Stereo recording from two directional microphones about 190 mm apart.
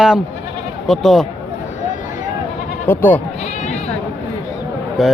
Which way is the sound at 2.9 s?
10° left (ahead or behind).